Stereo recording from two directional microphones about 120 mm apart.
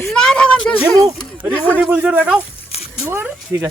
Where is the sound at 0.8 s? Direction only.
30° right (ahead or behind).